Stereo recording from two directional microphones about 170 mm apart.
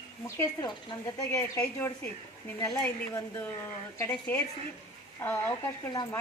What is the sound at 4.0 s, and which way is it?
A woman's voice, 15° left (ahead or behind).